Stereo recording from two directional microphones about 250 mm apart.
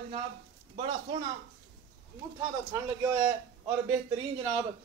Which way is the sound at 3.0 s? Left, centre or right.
Centre.